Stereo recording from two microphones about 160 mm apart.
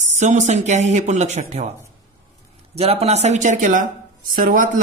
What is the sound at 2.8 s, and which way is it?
A man's voice, 40° right (ahead or behind).